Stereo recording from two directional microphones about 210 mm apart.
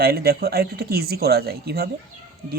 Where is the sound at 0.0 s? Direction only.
45° right (ahead or behind).